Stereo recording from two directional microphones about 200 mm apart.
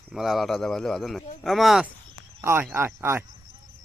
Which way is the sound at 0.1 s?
Centre (ahead or behind).